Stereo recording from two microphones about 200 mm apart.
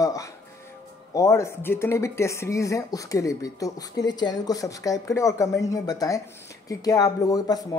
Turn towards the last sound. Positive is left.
turn(degrees=20)  # may be behind; listen again after turning